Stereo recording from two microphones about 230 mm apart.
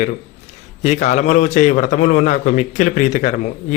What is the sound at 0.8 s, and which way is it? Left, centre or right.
A man's voice, left.